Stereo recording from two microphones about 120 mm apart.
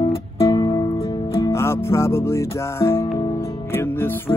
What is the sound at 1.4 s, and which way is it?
Music, 20° left (ahead or behind).